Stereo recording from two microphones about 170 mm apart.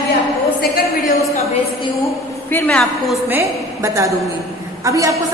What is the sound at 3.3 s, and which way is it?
A woman's voice, 15° right (ahead or behind).